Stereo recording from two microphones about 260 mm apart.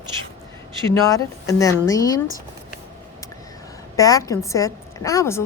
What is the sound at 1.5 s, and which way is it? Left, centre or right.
Speech, centre.